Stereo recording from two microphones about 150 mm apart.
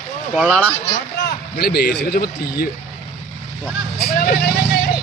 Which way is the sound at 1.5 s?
90° left.